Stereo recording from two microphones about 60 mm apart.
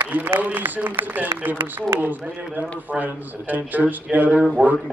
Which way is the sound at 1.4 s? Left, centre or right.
Right.